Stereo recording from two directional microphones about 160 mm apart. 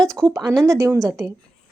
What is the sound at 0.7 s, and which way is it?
Speech, 20° right (ahead or behind).